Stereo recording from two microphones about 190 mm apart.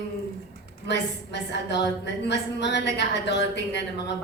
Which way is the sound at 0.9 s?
65° left (ahead or behind).